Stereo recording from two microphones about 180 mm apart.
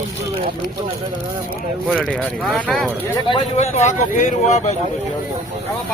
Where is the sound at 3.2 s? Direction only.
30° left (ahead or behind).